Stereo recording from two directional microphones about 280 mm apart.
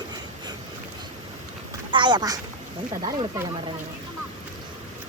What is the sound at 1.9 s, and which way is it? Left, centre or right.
Speech, centre.